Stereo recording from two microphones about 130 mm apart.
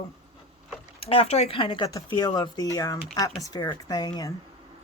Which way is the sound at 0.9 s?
45° left (ahead or behind).